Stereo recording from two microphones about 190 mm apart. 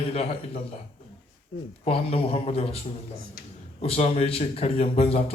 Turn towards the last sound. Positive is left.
turn(degrees=30)  # may be behind; listen again after turning